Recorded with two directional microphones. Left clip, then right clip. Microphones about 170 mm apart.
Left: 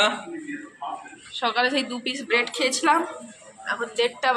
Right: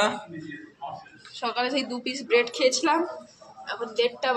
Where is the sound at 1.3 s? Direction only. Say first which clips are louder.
Left 4 dB; 5° left (ahead or behind).